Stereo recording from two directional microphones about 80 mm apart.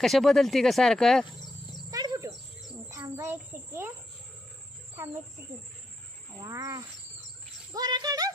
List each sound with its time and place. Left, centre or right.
0.0 s speech: centre
1.9 s wild animals: right
3.2 s speech: right
6.4 s speech: right
7.7 s speech: right